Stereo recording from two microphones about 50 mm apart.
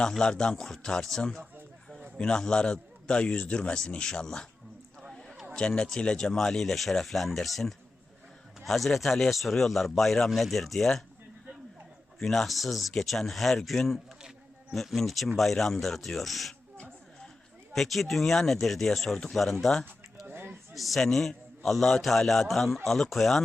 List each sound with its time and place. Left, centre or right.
0.1 s a man's voice: centre
5.5 s a man's voice: centre
12.2 s speech: centre
17.7 s a man's voice: centre
20.2 s a sound: right
20.7 s a man's voice: centre